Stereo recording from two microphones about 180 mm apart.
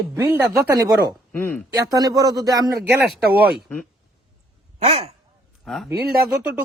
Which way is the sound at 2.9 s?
10° right (ahead or behind).